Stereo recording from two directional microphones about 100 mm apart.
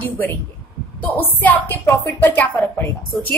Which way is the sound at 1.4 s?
15° left (ahead or behind).